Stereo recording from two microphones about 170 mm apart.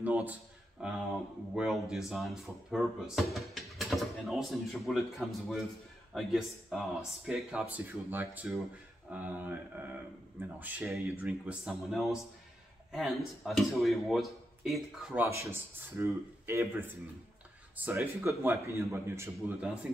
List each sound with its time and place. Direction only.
0.0 s a sound: 10° right (ahead or behind)
1.5 s speech: 5° right (ahead or behind)
15.2 s speech: 15° right (ahead or behind)